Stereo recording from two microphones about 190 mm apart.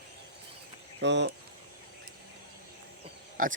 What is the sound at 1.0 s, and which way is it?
Speech, 65° right (ahead or behind).